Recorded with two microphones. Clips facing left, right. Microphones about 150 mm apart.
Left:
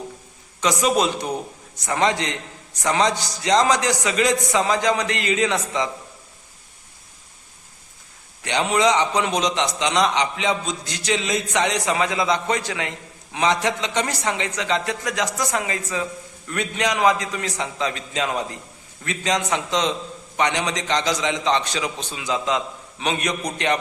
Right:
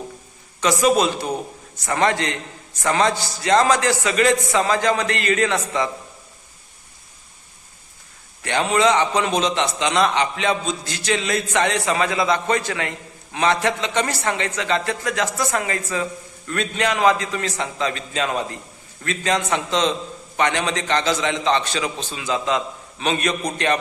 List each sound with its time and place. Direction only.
0.6 s a man's voice: 15° left (ahead or behind)
8.4 s a man's voice: 15° left (ahead or behind)